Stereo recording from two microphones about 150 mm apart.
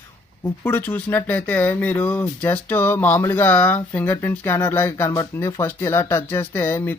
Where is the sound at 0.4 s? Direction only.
10° left (ahead or behind).